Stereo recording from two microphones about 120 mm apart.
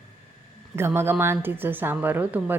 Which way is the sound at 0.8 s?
20° right (ahead or behind).